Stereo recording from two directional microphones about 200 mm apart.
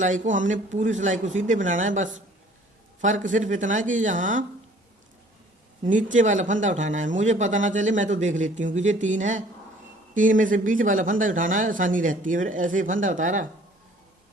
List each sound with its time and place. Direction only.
0.0 s speech: 40° right (ahead or behind)
5.8 s speech: 40° right (ahead or behind)